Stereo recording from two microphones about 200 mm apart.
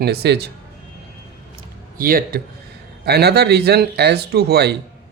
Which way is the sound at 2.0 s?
45° right (ahead or behind).